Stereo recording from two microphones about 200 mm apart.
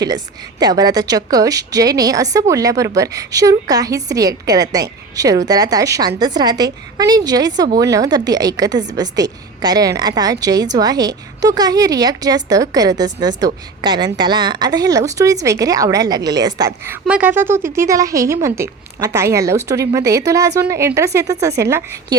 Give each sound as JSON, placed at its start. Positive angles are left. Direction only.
{"t": 0.6, "sound": "a woman's voice", "side_deg": -20}